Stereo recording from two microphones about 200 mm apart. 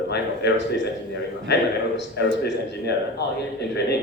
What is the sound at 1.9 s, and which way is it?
A man's voice, 60° left (ahead or behind).